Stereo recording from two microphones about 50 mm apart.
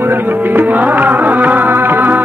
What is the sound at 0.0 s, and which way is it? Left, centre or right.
Music, right.